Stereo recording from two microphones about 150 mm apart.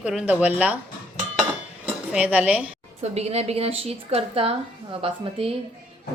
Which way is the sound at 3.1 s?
45° right (ahead or behind).